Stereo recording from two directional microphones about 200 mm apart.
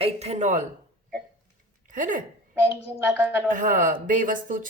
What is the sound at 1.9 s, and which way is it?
Speech, 40° right (ahead or behind).